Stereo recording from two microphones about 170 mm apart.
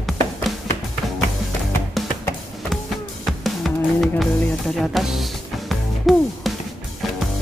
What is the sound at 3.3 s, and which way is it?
Music, centre (ahead or behind).